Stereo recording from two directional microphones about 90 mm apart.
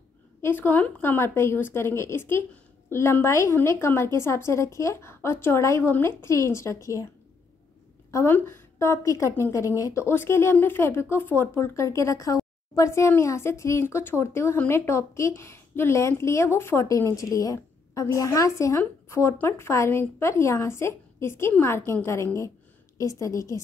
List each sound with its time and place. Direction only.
0.4 s a woman's voice: 25° left (ahead or behind)
8.3 s a woman's voice: 25° left (ahead or behind)
10.0 s a woman's voice: 25° left (ahead or behind)
16.8 s a woman's voice: 40° left (ahead or behind)